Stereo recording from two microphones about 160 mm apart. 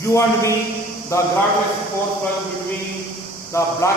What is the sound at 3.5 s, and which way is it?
Speech, 20° left (ahead or behind).